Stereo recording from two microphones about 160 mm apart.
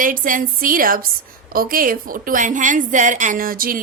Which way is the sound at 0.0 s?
60° right (ahead or behind).